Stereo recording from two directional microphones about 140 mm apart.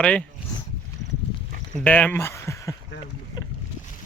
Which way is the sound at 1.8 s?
10° left (ahead or behind).